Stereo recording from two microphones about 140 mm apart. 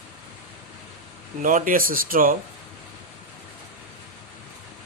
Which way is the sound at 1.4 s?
70° right (ahead or behind).